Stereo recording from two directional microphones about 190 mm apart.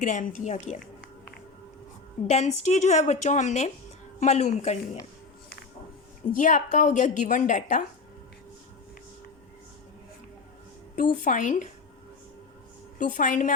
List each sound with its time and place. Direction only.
0.0 s a woman's voice: 40° left (ahead or behind)
2.2 s a woman's voice: 35° left (ahead or behind)
6.4 s a woman's voice: 40° left (ahead or behind)
10.9 s speech: 45° left (ahead or behind)
13.0 s speech: 45° left (ahead or behind)